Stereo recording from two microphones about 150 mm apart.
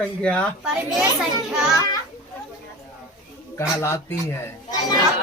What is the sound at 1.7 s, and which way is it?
Speech, 25° left (ahead or behind).